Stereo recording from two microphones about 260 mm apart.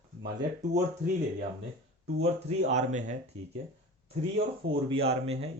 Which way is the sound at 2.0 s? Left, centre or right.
Right.